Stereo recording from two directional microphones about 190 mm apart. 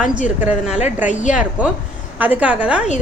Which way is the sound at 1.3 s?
5° right (ahead or behind).